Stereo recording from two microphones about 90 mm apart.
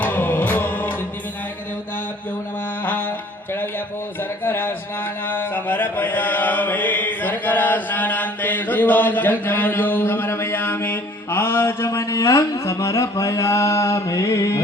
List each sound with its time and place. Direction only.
0.0 s music: 20° left (ahead or behind)
2.8 s music: 20° left (ahead or behind)
4.4 s a sound: 20° left (ahead or behind)
5.3 s mantra: 20° left (ahead or behind)